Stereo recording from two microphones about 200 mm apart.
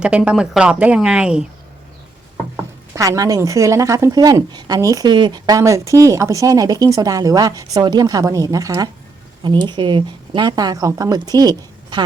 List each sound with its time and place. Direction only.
0.0 s speech: 5° right (ahead or behind)
2.9 s a woman's voice: 15° right (ahead or behind)